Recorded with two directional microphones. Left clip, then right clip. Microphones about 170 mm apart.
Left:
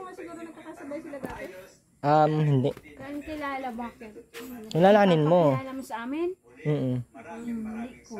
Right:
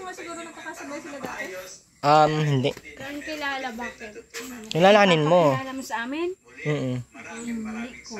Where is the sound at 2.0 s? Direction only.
20° left (ahead or behind).